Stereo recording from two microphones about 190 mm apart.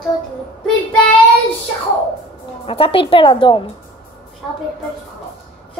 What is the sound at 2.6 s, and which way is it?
Speech, 30° left (ahead or behind).